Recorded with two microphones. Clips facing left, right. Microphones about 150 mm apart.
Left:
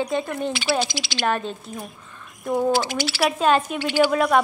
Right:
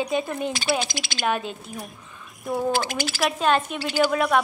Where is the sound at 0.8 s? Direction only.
50° right (ahead or behind).